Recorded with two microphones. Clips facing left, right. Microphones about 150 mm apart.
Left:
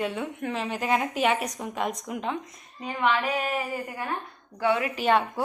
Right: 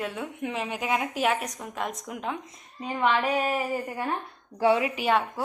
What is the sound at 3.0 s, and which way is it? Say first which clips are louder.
A woman's voice: right 1 dB; 35° right (ahead or behind).